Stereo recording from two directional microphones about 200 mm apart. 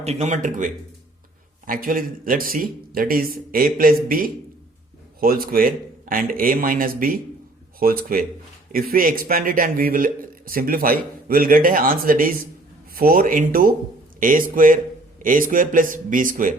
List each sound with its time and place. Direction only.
0.0 s a man's voice: 35° right (ahead or behind)